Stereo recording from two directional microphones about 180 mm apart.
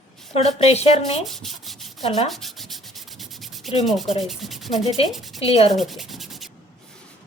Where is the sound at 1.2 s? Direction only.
Centre (ahead or behind).